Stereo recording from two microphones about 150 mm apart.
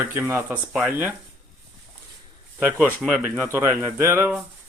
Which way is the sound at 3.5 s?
15° right (ahead or behind).